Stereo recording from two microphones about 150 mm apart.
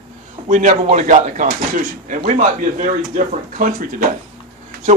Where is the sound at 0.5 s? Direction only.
60° right (ahead or behind).